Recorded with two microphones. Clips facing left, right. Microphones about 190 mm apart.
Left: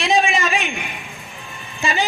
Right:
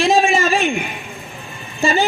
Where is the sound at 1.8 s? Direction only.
35° right (ahead or behind).